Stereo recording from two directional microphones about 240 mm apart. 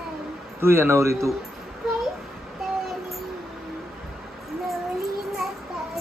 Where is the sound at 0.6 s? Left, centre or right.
Centre.